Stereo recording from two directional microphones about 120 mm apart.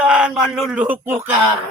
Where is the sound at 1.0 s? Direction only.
20° right (ahead or behind).